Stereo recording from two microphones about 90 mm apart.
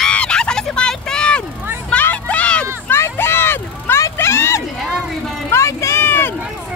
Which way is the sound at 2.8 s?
25° left (ahead or behind).